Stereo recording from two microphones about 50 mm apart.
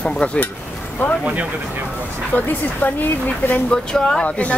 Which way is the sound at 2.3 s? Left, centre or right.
Left.